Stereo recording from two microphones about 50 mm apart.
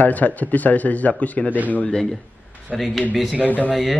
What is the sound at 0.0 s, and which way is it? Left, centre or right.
Speech, left.